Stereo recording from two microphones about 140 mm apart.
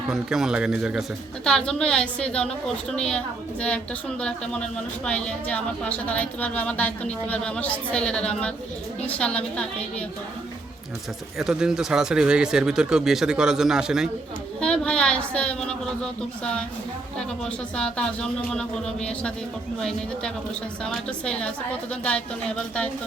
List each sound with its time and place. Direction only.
0.1 s speech: 5° right (ahead or behind)
1.5 s a woman's voice: 5° left (ahead or behind)
5.0 s a woman's voice: 10° left (ahead or behind)
11.3 s speech: 5° right (ahead or behind)
14.6 s a woman's voice: 5° left (ahead or behind)